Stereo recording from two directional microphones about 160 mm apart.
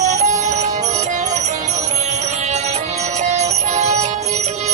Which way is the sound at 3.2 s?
45° right (ahead or behind).